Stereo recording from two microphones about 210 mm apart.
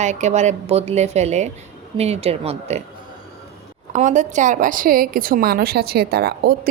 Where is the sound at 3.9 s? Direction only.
35° right (ahead or behind).